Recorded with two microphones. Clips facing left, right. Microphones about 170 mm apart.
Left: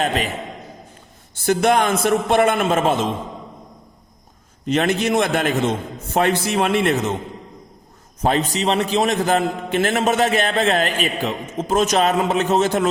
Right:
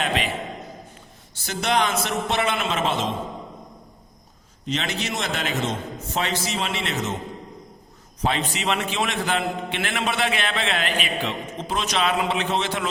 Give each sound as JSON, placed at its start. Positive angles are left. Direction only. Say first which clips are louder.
{"t": 1.4, "sound": "a man's voice", "louder": "left 7 dB", "side_deg": 50}
{"t": 4.6, "sound": "a man's voice", "louder": "left 9 dB", "side_deg": 55}
{"t": 8.2, "sound": "a man's voice", "louder": "left 6 dB", "side_deg": 40}